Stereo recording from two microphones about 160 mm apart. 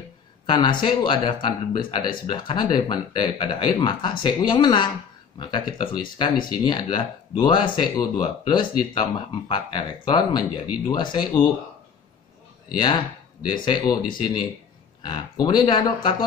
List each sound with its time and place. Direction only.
0.5 s speech: 30° left (ahead or behind)
12.7 s speech: 30° left (ahead or behind)